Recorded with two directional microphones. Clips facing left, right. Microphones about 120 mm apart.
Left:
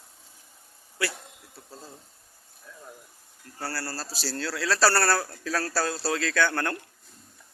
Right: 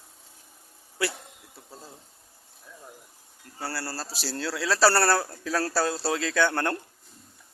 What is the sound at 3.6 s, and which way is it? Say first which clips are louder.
A man's voice: even; 20° right (ahead or behind).